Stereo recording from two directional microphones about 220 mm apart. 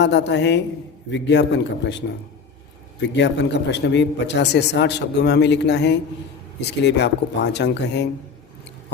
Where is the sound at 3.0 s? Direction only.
50° left (ahead or behind).